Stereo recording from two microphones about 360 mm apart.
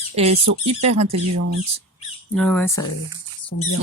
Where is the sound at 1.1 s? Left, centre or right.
Right.